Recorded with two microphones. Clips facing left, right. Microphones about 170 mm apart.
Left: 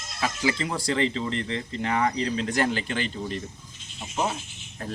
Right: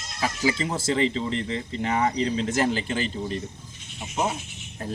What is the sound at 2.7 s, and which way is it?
Speech, 35° right (ahead or behind).